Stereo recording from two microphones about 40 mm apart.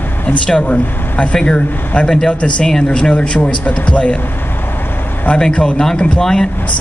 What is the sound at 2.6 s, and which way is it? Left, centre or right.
Speech, centre.